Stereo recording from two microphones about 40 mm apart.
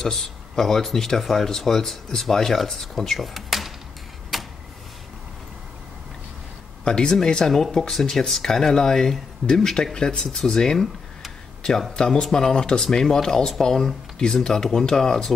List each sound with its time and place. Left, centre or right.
0.0 s speech: centre
3.2 s a sound: centre
6.8 s speech: centre
11.9 s speech: centre